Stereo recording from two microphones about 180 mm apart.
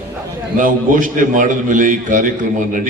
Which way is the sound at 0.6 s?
50° right (ahead or behind).